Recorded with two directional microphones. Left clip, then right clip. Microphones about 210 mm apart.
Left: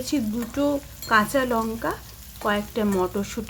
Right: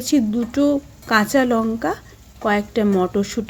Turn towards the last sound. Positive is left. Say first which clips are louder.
# right 5 dB
turn(degrees=-20)  # may be behind; listen again after turning